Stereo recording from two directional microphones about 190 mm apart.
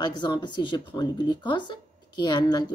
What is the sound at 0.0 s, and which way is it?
Speech, 25° left (ahead or behind).